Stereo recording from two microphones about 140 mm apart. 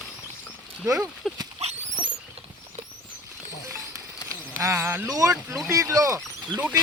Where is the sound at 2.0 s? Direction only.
35° right (ahead or behind).